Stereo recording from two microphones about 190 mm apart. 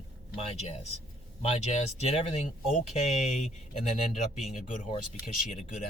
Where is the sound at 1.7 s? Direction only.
35° left (ahead or behind).